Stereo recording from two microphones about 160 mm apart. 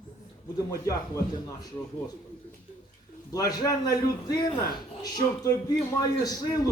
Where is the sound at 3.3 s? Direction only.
20° left (ahead or behind).